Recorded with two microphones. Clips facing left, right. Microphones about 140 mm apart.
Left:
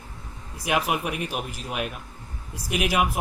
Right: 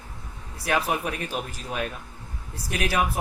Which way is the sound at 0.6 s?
15° left (ahead or behind).